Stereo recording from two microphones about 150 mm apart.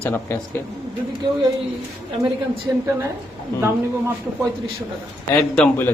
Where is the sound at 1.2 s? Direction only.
30° right (ahead or behind).